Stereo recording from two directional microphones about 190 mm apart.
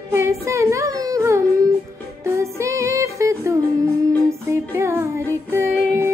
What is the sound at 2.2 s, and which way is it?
Music, 15° right (ahead or behind).